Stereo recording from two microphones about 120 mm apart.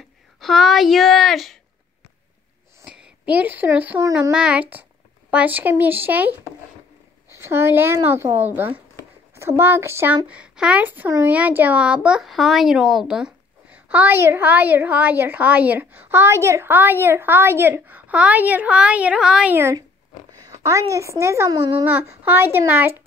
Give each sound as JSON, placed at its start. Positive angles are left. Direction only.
{"t": 0.4, "sound": "speech", "side_deg": 0}
{"t": 2.8, "sound": "a woman's voice", "side_deg": -10}
{"t": 10.2, "sound": "speech", "side_deg": -10}
{"t": 20.9, "sound": "speech", "side_deg": -25}
{"t": 21.8, "sound": "speech", "side_deg": -15}